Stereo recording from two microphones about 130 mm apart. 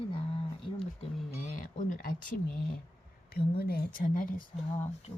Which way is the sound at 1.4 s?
85° left.